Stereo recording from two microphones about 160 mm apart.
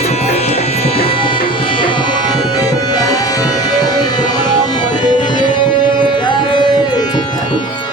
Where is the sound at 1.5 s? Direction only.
35° left (ahead or behind).